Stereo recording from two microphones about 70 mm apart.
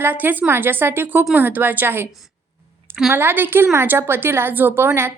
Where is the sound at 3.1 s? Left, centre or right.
Right.